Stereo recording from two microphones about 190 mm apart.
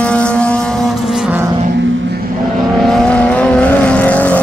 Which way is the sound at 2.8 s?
5° left (ahead or behind).